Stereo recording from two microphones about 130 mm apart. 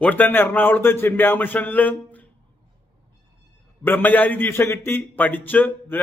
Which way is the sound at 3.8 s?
15° left (ahead or behind).